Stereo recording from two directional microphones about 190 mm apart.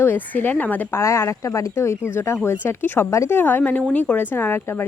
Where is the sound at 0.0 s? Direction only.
10° left (ahead or behind).